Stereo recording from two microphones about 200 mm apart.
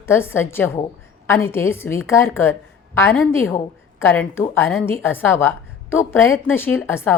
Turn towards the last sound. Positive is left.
turn(degrees=10)  # may be behind; listen again after turning